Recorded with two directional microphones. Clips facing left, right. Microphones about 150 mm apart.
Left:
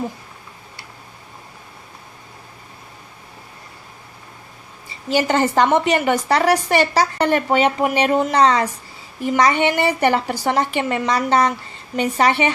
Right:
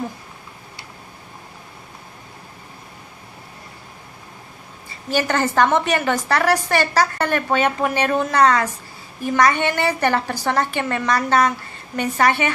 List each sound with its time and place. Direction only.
5.1 s a woman's voice: 20° left (ahead or behind)